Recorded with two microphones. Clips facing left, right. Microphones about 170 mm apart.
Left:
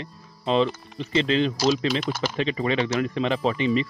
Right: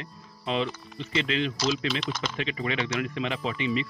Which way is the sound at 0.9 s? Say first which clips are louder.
Left 6 dB; 35° left (ahead or behind).